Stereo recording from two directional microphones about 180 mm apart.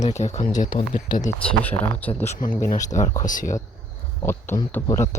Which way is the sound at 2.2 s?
45° left (ahead or behind).